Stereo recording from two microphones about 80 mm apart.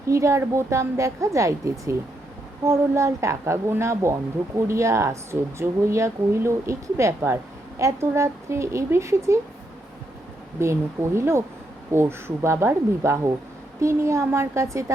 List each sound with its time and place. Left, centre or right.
0.1 s a woman's voice: right
10.6 s a woman's voice: right